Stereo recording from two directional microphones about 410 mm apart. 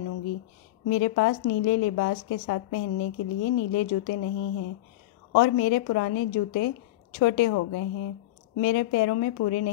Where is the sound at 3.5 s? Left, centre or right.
Left.